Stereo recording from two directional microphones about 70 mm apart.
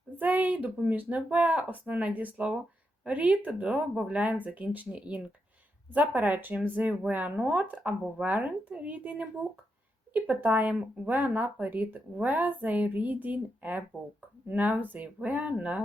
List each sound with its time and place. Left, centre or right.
0.2 s speech: right